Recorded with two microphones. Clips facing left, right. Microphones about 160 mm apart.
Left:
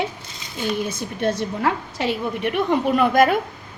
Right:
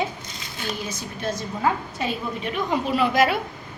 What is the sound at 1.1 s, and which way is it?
A woman's voice, 65° left (ahead or behind).